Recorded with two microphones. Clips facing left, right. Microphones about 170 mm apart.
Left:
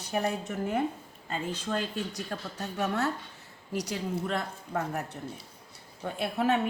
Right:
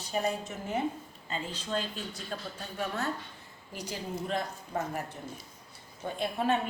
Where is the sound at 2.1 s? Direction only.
75° left (ahead or behind).